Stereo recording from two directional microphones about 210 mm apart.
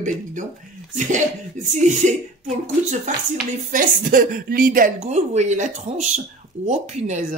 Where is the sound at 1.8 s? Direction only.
35° right (ahead or behind).